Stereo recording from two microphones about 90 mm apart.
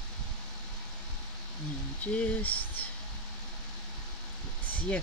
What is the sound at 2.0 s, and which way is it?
Speech, 15° left (ahead or behind).